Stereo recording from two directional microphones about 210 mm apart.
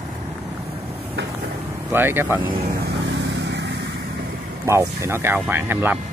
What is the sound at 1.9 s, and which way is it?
Speech, 10° right (ahead or behind).